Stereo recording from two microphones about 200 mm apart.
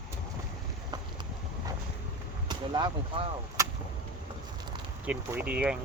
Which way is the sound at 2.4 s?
20° right (ahead or behind).